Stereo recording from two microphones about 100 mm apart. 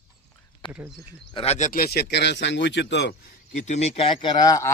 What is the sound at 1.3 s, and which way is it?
Speech, 75° left (ahead or behind).